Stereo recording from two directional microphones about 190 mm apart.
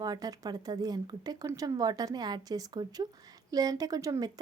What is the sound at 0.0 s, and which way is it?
A woman's voice, 20° right (ahead or behind).